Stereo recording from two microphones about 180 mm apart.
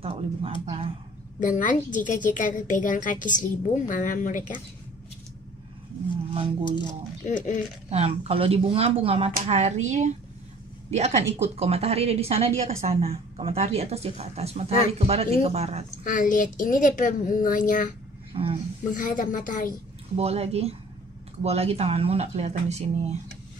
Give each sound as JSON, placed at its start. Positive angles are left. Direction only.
{"t": 0.0, "sound": "speech", "side_deg": -35}
{"t": 1.4, "sound": "a woman's voice", "side_deg": 45}
{"t": 6.3, "sound": "speech", "side_deg": -25}
{"t": 7.2, "sound": "a woman's voice", "side_deg": 45}
{"t": 7.9, "sound": "speech", "side_deg": -35}
{"t": 16.0, "sound": "a woman's voice", "side_deg": 45}
{"t": 18.3, "sound": "speech", "side_deg": -30}
{"t": 18.9, "sound": "a woman's voice", "side_deg": 45}
{"t": 20.2, "sound": "speech", "side_deg": -35}